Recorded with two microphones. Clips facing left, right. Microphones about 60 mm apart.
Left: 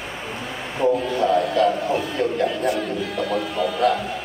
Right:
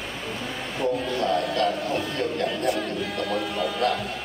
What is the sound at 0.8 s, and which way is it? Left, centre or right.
Music, centre.